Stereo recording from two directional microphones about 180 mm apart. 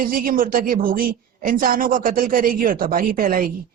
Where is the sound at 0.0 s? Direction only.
50° right (ahead or behind).